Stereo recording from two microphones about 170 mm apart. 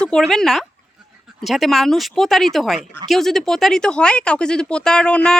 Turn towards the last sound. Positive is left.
turn(degrees=5)  # may be behind; listen again after turning